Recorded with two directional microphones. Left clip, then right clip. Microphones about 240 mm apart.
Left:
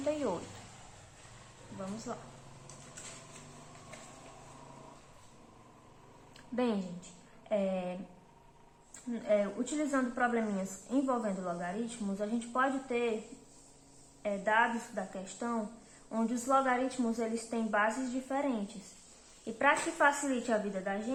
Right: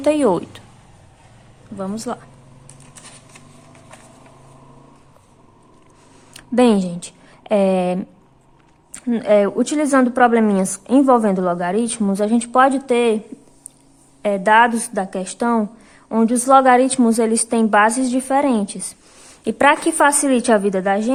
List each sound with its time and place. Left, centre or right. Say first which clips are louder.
0.0 s a woman's voice: right 18 dB; right
2.1 s a woman's voice: right 15 dB; right
6.3 s a sound: right 19 dB; right
7.4 s a woman's voice: right 17 dB; right
9.0 s a woman's voice: right 16 dB; right
14.2 s a woman's voice: right 17 dB; right